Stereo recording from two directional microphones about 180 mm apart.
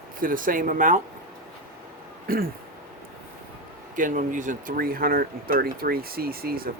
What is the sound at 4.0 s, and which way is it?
Speech, 45° right (ahead or behind).